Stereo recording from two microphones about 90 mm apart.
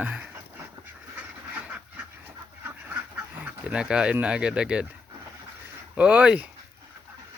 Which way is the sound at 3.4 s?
15° right (ahead or behind).